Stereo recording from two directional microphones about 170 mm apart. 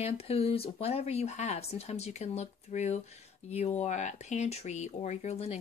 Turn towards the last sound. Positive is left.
turn(degrees=40)  # may be behind; listen again after turning